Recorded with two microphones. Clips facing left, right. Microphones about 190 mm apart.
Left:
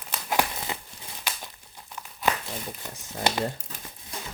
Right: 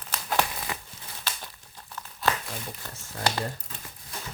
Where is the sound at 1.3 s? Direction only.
15° left (ahead or behind).